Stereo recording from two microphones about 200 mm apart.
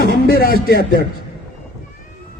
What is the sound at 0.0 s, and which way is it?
A man's voice, 50° left (ahead or behind).